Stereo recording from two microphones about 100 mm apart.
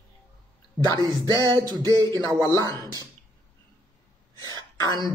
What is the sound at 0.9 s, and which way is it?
Music, 40° right (ahead or behind).